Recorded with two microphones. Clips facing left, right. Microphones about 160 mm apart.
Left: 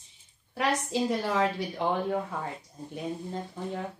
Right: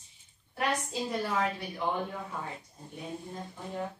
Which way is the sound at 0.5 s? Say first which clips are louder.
Left 4 dB; 90° left.